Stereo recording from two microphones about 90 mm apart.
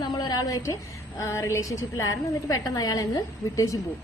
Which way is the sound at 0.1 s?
50° left (ahead or behind).